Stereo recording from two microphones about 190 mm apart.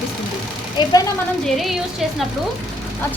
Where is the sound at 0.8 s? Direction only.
25° left (ahead or behind).